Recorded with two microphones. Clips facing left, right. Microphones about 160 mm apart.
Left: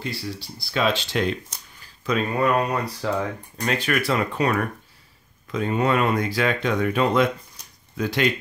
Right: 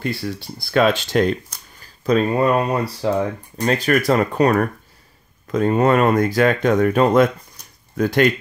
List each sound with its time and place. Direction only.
0.0 s speech: 55° right (ahead or behind)